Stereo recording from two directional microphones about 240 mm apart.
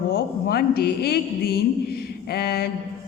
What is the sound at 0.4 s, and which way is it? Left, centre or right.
A woman's voice, left.